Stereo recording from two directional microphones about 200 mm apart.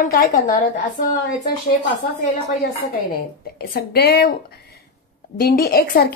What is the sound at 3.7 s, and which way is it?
Speech, 50° left (ahead or behind).